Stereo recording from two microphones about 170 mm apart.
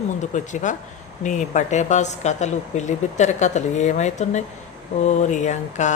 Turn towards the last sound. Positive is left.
turn(degrees=45)  # may be behind; listen again after turning